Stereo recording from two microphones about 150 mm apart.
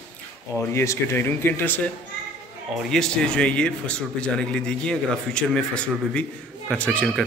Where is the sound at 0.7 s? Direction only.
20° left (ahead or behind).